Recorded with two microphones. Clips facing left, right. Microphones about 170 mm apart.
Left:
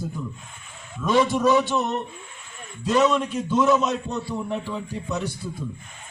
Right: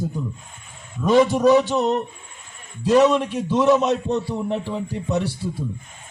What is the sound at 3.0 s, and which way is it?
A man's voice, 35° right (ahead or behind).